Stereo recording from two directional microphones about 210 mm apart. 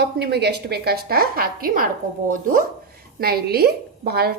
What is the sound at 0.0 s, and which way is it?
A woman's voice, 50° right (ahead or behind).